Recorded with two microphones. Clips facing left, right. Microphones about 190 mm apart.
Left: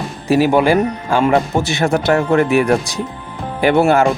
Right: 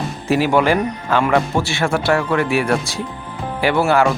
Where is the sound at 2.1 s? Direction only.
45° left (ahead or behind).